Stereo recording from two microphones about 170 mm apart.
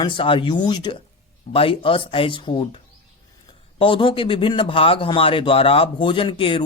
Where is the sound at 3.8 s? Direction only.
30° left (ahead or behind).